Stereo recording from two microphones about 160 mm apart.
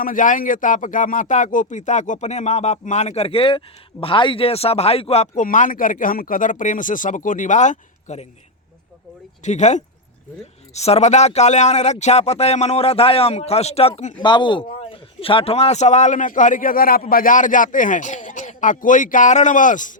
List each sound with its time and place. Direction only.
0.0 s a man's voice: 55° left (ahead or behind); by 5.3 s 40° left (ahead or behind)
5.4 s speech: 55° left (ahead or behind)
9.4 s a man's voice: 45° left (ahead or behind)